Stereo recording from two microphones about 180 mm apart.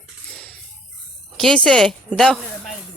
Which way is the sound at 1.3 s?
5° left (ahead or behind).